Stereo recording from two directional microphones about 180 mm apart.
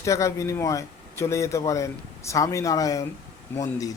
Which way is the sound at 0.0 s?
15° left (ahead or behind).